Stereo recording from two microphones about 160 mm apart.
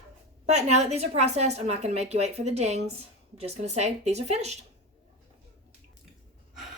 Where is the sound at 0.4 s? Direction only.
45° right (ahead or behind).